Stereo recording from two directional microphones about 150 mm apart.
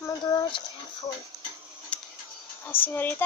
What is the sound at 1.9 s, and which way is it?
Tick-tock, 10° left (ahead or behind).